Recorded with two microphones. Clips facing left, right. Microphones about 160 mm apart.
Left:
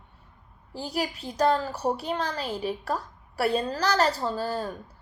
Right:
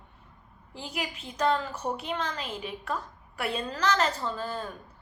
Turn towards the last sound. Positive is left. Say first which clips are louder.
# left 4 dB
turn(degrees=35)  # may be behind; listen again after turning